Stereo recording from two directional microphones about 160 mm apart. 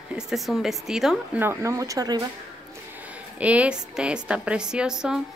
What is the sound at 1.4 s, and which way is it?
Speech, 15° right (ahead or behind).